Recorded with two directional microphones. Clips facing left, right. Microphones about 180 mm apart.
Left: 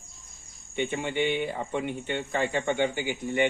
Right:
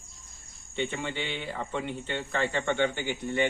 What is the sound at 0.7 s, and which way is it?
Speech, 15° left (ahead or behind).